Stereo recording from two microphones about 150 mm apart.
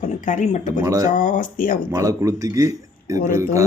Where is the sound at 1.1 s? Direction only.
60° left (ahead or behind).